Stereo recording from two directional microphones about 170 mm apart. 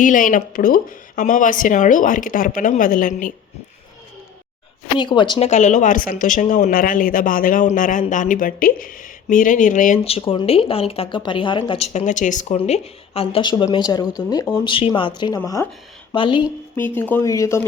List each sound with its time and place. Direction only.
0.0 s speech: 50° left (ahead or behind)
4.9 s speech: 30° left (ahead or behind)
5.5 s speech: 45° left (ahead or behind); by 16.5 s 30° left (ahead or behind)
16.7 s speech: 10° left (ahead or behind)